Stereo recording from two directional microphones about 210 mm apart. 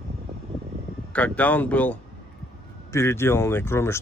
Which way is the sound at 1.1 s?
5° left (ahead or behind).